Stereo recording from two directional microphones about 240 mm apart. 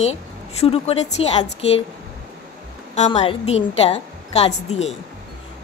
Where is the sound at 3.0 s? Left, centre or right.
Left.